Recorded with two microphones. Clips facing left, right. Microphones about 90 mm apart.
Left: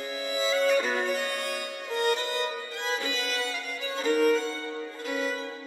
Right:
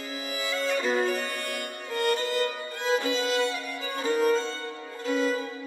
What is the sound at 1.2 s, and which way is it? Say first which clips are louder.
Music: left 1 dB; 20° left (ahead or behind).